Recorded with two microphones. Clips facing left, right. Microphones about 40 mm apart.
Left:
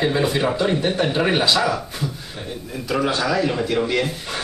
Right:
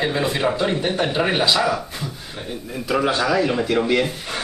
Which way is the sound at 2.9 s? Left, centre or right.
Centre.